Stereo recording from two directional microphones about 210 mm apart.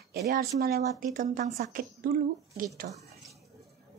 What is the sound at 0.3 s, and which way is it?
A woman's voice, 45° right (ahead or behind).